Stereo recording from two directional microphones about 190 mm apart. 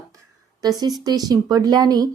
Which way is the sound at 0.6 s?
20° right (ahead or behind).